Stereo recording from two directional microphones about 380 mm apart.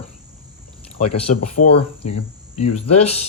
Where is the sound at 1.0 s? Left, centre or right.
Left.